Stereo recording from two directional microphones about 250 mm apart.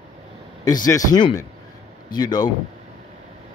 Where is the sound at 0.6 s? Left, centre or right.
Centre.